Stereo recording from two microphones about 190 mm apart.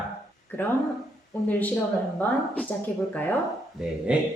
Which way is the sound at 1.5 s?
10° left (ahead or behind).